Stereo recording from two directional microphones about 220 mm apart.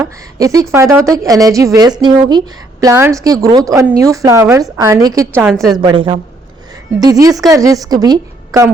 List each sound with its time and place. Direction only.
0.0 s a woman's voice: 15° right (ahead or behind)